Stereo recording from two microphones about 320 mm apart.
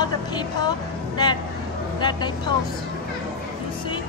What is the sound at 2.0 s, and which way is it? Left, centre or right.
Speech, centre.